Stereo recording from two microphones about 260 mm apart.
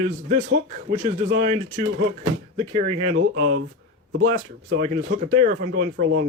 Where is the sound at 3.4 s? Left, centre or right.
Right.